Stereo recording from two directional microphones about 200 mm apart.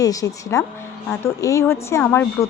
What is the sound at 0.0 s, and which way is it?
Speech, 15° left (ahead or behind).